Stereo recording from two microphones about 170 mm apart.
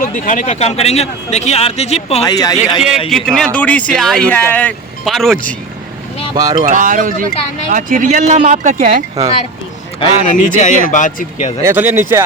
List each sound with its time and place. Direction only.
0.0 s speech: 50° left (ahead or behind)
2.2 s speech: 20° left (ahead or behind)
2.7 s speech: 5° right (ahead or behind)
6.3 s speech: 25° right (ahead or behind)
6.6 s speech: 50° right (ahead or behind)
10.2 s speech: 45° left (ahead or behind)
11.6 s speech: 10° right (ahead or behind)